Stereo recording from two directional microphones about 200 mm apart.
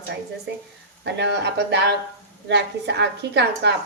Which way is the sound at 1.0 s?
60° right (ahead or behind).